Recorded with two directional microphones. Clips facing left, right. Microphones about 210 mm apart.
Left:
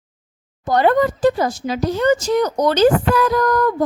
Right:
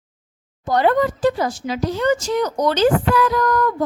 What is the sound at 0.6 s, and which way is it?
A woman's voice, 45° left (ahead or behind).